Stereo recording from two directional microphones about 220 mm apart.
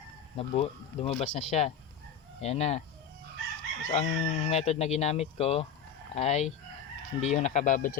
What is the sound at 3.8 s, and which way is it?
Speech, 30° left (ahead or behind).